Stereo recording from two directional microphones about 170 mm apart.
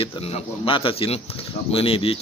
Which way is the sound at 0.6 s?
30° left (ahead or behind).